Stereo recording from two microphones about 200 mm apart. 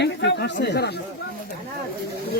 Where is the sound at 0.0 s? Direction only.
60° left (ahead or behind).